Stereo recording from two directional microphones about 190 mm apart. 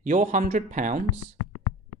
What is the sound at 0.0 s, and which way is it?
Speech, 40° right (ahead or behind).